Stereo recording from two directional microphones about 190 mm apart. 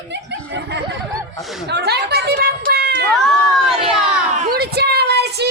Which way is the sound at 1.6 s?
60° right (ahead or behind).